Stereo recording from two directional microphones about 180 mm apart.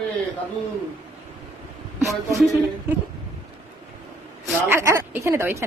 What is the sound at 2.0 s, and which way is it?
Speech, 15° right (ahead or behind).